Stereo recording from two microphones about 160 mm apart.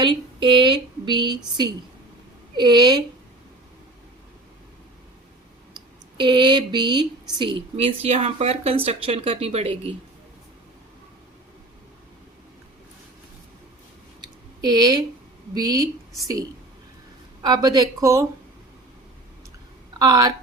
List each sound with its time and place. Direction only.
0.0 s speech: 30° right (ahead or behind)
5.7 s speech: 30° right (ahead or behind)
14.2 s a sound: 25° right (ahead or behind)
15.5 s speech: 25° right (ahead or behind)
17.4 s speech: 25° right (ahead or behind)
20.0 s speech: 25° right (ahead or behind)